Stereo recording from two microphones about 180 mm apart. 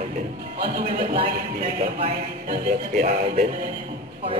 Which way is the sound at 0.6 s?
55° right (ahead or behind).